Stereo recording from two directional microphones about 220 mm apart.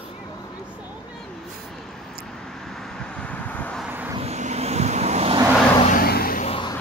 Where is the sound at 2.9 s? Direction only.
5° left (ahead or behind).